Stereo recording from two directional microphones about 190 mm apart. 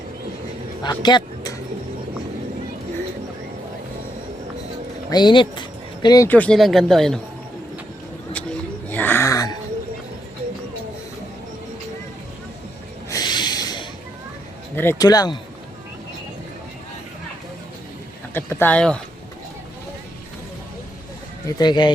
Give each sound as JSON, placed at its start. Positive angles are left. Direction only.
{"t": 0.8, "sound": "a sound", "side_deg": 20}
{"t": 5.1, "sound": "speech", "side_deg": 25}
{"t": 6.2, "sound": "speech", "side_deg": 10}
{"t": 8.9, "sound": "a sound", "side_deg": 10}
{"t": 13.1, "sound": "snort", "side_deg": 20}
{"t": 14.8, "sound": "speech", "side_deg": 15}
{"t": 18.3, "sound": "speech", "side_deg": 10}
{"t": 21.4, "sound": "speech", "side_deg": 20}